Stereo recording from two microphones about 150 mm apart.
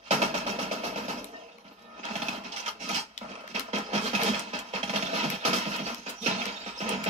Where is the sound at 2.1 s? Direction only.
45° right (ahead or behind).